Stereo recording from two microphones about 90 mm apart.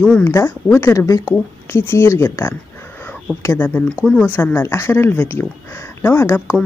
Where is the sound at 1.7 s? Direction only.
25° left (ahead or behind).